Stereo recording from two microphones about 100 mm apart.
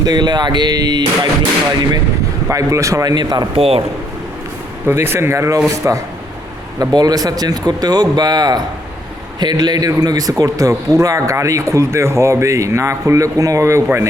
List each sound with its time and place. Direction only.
0.0 s speech: 45° right (ahead or behind)
2.5 s speech: 30° right (ahead or behind)
3.5 s speech: 65° right (ahead or behind)
4.9 s speech: 25° right (ahead or behind)